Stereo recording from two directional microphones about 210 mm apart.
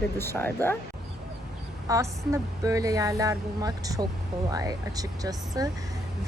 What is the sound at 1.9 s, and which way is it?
A woman's voice, 15° right (ahead or behind).